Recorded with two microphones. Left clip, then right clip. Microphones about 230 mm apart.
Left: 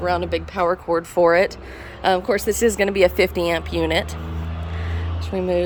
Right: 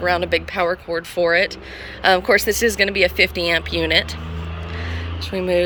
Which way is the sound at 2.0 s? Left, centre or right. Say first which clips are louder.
Right 4 dB; centre.